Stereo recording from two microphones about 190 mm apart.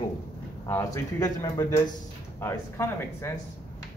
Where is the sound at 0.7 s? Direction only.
15° left (ahead or behind).